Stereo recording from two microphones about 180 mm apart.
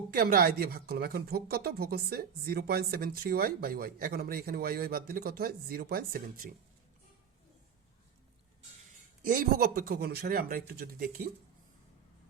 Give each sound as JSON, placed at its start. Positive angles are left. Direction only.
{"t": 0.1, "sound": "speech", "side_deg": -55}
{"t": 9.2, "sound": "speech", "side_deg": -50}